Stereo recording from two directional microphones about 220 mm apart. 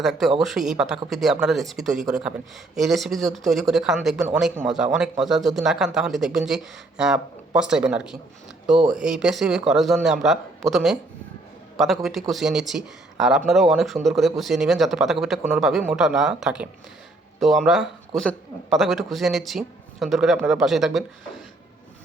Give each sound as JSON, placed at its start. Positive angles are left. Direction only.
{"t": 0.0, "sound": "a man's voice", "side_deg": 0}